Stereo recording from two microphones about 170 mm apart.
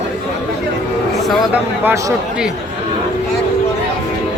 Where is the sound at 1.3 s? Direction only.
10° right (ahead or behind).